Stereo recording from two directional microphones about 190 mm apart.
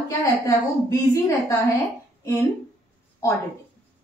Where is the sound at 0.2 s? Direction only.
15° left (ahead or behind).